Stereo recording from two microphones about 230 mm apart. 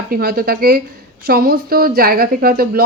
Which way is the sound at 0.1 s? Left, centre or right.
Right.